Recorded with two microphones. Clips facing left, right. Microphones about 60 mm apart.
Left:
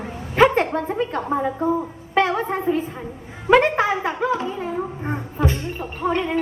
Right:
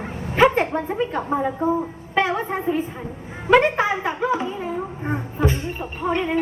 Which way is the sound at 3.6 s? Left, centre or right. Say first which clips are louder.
Left 1 dB; centre.